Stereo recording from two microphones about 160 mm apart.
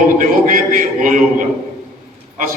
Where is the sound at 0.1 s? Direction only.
55° right (ahead or behind).